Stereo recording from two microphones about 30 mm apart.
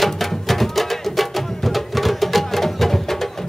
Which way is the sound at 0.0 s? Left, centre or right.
Centre.